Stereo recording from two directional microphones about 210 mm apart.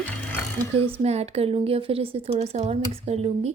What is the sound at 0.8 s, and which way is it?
Speech, 25° right (ahead or behind).